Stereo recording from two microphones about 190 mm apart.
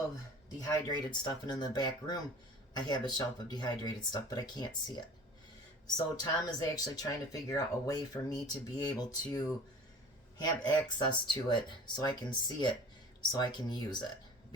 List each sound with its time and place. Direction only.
0.6 s speech: 20° left (ahead or behind)
6.1 s speech: 20° left (ahead or behind)